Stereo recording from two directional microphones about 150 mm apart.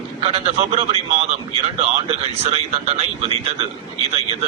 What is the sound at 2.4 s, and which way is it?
Speech, 40° right (ahead or behind).